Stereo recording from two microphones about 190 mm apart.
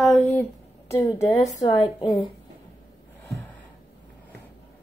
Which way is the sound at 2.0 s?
25° left (ahead or behind).